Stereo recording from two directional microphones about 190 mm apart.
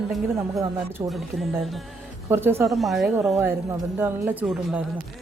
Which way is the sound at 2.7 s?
Centre (ahead or behind).